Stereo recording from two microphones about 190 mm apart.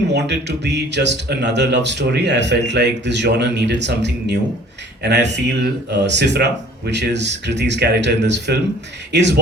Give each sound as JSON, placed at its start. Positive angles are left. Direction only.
{"t": 0.1, "sound": "speech", "side_deg": -65}